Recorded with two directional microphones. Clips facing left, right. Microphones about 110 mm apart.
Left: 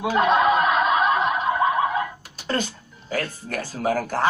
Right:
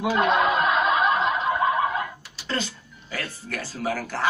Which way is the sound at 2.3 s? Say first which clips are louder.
Left 4 dB; 50° left (ahead or behind).